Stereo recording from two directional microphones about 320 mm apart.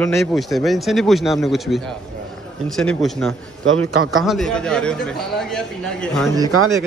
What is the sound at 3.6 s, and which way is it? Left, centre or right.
Speech, right.